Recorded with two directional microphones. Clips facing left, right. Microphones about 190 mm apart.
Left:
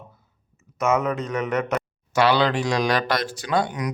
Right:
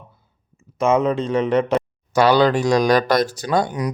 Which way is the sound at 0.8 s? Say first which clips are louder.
Right 5 dB; 30° right (ahead or behind).